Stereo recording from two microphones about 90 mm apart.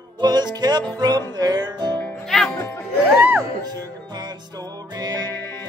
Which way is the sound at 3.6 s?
50° right (ahead or behind).